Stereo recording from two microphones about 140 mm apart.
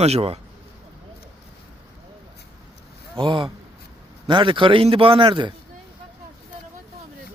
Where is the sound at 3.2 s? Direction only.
35° right (ahead or behind).